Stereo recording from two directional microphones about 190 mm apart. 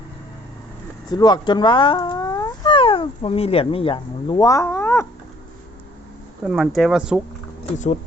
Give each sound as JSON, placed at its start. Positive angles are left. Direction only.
{"t": 1.1, "sound": "speech", "side_deg": 20}
{"t": 6.4, "sound": "speech", "side_deg": 0}